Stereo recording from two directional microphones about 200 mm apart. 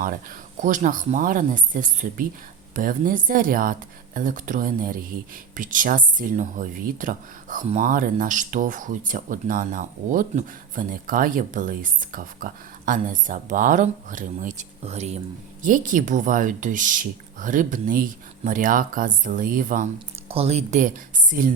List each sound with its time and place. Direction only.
0.0 s speech: 40° right (ahead or behind)